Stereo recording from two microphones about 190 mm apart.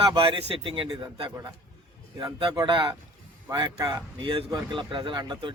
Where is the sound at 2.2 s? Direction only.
25° right (ahead or behind).